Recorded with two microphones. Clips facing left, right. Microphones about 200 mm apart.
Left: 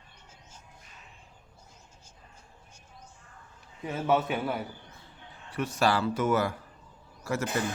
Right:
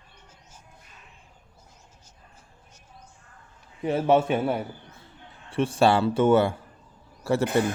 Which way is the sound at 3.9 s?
30° right (ahead or behind).